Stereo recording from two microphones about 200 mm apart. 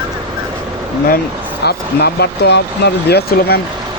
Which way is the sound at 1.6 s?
55° left (ahead or behind).